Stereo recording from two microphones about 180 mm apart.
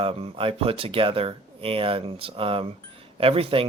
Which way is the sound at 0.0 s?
30° right (ahead or behind).